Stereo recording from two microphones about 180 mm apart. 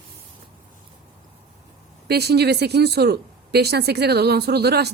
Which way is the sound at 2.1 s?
65° right (ahead or behind).